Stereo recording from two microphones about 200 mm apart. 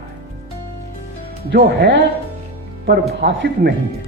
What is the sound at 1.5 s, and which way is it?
Speech, 55° right (ahead or behind).